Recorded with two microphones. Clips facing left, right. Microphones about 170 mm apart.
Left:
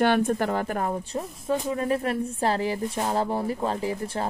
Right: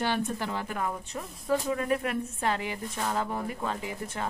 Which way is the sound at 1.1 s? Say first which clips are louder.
Left 2 dB; 25° left (ahead or behind).